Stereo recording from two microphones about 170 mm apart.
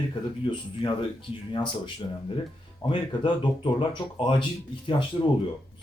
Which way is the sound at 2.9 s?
30° left (ahead or behind).